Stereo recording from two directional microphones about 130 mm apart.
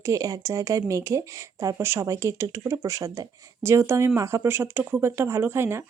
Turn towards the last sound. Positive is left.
turn(degrees=-20)  # may be behind; listen again after turning